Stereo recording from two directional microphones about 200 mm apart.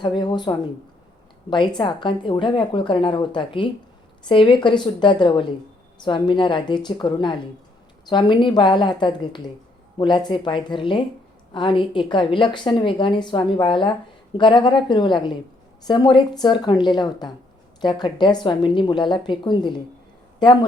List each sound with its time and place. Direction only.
0.0 s a woman's voice: 25° left (ahead or behind)